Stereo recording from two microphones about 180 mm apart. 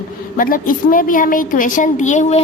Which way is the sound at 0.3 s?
50° left (ahead or behind).